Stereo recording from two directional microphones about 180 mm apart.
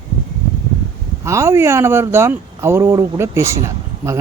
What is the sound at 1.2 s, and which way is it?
Speech, 15° right (ahead or behind).